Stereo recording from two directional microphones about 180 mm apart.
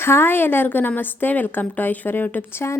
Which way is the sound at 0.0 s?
15° left (ahead or behind).